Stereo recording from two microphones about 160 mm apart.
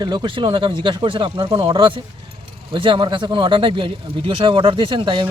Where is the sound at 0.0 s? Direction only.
30° right (ahead or behind).